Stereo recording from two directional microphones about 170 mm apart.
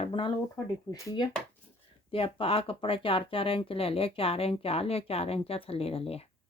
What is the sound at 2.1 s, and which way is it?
Speech, 35° left (ahead or behind).